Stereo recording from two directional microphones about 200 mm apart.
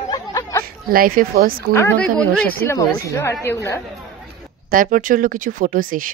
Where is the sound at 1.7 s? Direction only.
10° left (ahead or behind).